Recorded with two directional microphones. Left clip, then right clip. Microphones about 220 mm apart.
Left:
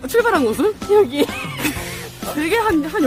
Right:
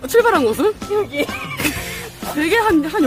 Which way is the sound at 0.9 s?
50° left (ahead or behind).